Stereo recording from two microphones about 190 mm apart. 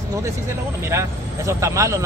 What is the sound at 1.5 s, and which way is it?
Speech, 15° right (ahead or behind).